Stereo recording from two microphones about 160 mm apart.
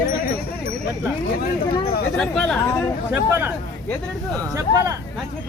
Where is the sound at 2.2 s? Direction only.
5° left (ahead or behind).